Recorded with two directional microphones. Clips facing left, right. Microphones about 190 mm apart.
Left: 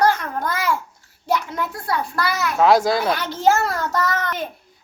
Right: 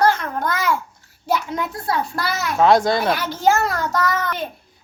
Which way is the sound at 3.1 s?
5° right (ahead or behind).